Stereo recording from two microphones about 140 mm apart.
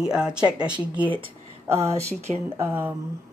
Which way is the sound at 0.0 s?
5° right (ahead or behind).